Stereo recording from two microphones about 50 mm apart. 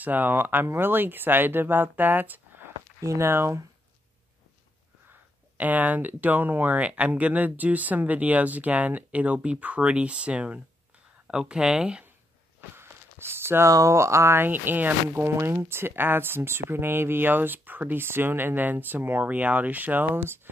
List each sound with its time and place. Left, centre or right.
0.0 s speech: right
3.0 s speech: right
5.6 s speech: right
6.8 s speech: right
12.7 s a sound: right
13.7 s speech: right
14.4 s speech: right
15.1 s speech: right